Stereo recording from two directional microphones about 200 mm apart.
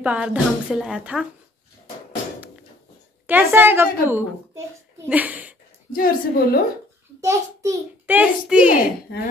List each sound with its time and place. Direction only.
0.0 s a woman's voice: 5° right (ahead or behind)
3.3 s a child's voice: 10° right (ahead or behind)
5.9 s a woman's voice: 45° left (ahead or behind)
7.2 s a child's voice: 15° right (ahead or behind)